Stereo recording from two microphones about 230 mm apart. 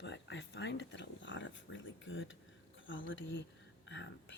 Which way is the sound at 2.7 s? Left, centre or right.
Left.